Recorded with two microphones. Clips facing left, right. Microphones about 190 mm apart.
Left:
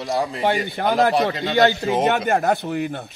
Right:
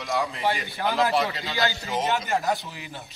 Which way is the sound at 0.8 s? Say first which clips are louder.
Left 5 dB; 55° left (ahead or behind).